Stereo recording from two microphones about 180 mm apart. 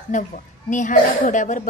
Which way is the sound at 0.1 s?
40° left (ahead or behind).